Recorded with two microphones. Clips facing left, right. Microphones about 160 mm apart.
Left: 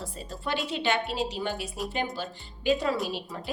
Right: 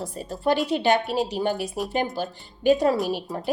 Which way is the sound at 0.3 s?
40° right (ahead or behind).